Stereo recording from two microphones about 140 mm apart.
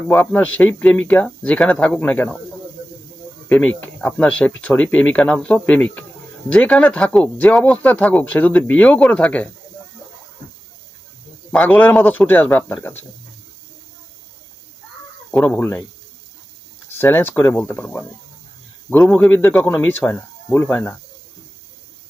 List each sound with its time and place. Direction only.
0.1 s speech: 10° left (ahead or behind)
3.5 s speech: 10° left (ahead or behind)
11.5 s speech: 10° left (ahead or behind)
15.3 s speech: 15° left (ahead or behind)
17.0 s speech: 15° left (ahead or behind)